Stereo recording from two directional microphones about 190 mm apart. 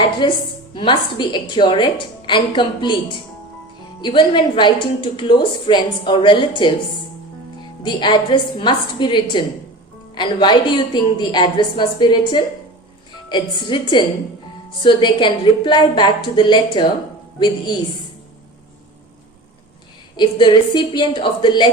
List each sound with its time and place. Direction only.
0.2 s a woman's voice: 25° left (ahead or behind)
7.9 s a woman's voice: 25° left (ahead or behind)
20.1 s a woman's voice: 25° left (ahead or behind)